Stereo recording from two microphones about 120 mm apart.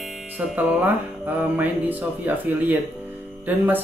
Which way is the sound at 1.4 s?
15° right (ahead or behind).